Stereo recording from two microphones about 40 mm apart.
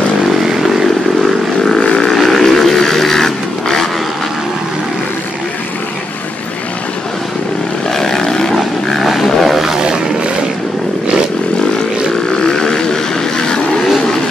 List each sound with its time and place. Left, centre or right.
0.4 s vehicle: centre
1.8 s a sound: left
2.2 s vehicle: centre
7.9 s vehicle: centre
9.0 s a sound: centre
12.5 s vehicle: centre